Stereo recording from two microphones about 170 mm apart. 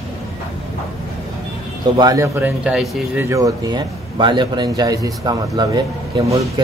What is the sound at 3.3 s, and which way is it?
A man's voice, 20° right (ahead or behind).